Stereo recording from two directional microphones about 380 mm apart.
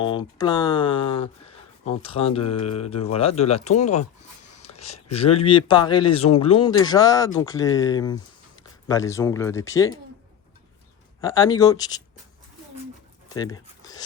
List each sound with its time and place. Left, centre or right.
0.0 s speech: centre
11.2 s speech: centre
13.4 s speech: centre